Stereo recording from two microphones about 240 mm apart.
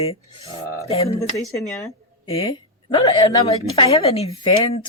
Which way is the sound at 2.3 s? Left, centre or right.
Left.